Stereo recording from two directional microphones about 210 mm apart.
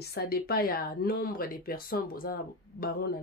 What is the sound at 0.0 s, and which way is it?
Speech, 50° left (ahead or behind).